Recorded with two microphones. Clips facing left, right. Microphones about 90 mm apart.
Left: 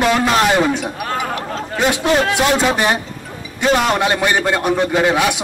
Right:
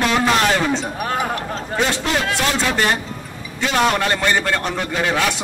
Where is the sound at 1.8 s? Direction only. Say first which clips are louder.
Left 5 dB; 15° left (ahead or behind).